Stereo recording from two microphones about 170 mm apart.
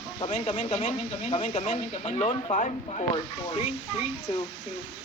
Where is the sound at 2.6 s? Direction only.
45° left (ahead or behind).